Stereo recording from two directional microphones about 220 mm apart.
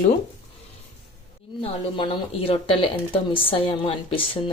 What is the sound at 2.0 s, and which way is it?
Speech, 25° left (ahead or behind).